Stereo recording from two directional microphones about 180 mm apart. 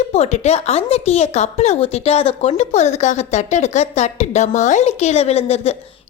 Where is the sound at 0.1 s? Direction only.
35° left (ahead or behind).